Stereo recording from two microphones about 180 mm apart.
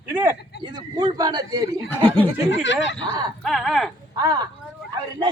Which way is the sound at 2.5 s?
90° left.